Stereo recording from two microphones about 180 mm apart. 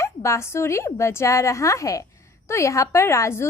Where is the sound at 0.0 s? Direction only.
15° left (ahead or behind).